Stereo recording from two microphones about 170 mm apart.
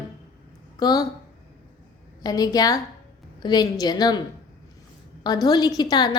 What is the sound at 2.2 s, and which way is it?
A woman's voice, 20° left (ahead or behind).